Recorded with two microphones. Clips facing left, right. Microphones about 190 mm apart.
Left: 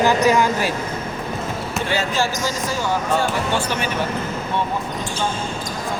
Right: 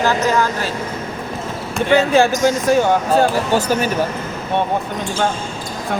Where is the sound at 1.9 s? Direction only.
60° right (ahead or behind).